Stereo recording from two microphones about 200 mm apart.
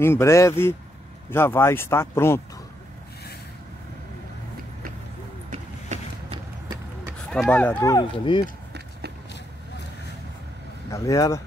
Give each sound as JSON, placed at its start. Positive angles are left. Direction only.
{"t": 0.0, "sound": "speech", "side_deg": 15}
{"t": 5.5, "sound": "vehicle", "side_deg": -35}
{"t": 7.2, "sound": "speech", "side_deg": 5}
{"t": 10.9, "sound": "speech", "side_deg": 15}